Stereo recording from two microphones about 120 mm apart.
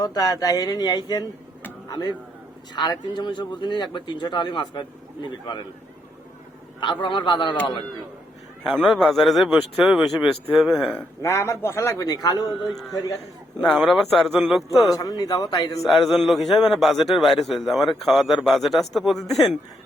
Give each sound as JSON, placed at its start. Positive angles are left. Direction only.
{"t": 0.0, "sound": "speech", "side_deg": 30}
{"t": 7.0, "sound": "speech", "side_deg": 40}
{"t": 8.7, "sound": "speech", "side_deg": 0}
{"t": 11.2, "sound": "a man's voice", "side_deg": 20}
{"t": 12.5, "sound": "speech", "side_deg": 0}
{"t": 14.9, "sound": "speech", "side_deg": 30}
{"t": 15.8, "sound": "speech", "side_deg": 0}